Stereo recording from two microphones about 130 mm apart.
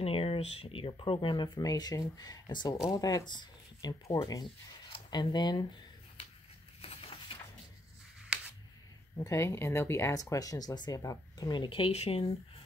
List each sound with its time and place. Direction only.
0.0 s speech: 45° left (ahead or behind); by 4.5 s 30° left (ahead or behind)
4.8 s speech: 40° left (ahead or behind)
6.8 s a sound: 50° left (ahead or behind)
9.2 s speech: 20° left (ahead or behind); by 12.3 s 50° left (ahead or behind)